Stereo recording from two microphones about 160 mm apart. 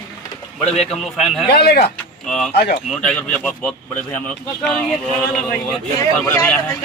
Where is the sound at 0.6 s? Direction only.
40° left (ahead or behind).